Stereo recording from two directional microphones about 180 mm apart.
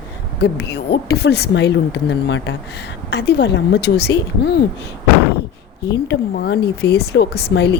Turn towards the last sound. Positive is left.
turn(degrees=70)  # may be behind; listen again after turning